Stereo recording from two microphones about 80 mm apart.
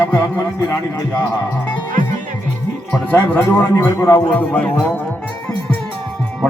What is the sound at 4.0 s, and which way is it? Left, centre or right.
Speech, left.